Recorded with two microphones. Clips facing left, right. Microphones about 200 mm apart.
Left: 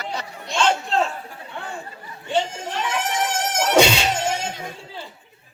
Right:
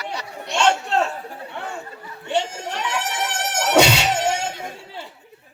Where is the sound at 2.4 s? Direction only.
70° right (ahead or behind).